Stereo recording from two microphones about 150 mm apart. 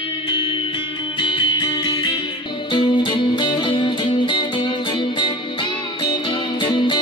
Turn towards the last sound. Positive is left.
turn(degrees=30)  # may be behind; listen again after turning